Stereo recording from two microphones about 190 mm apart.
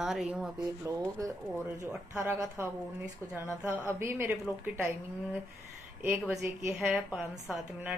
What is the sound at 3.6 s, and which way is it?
Speech, 15° right (ahead or behind).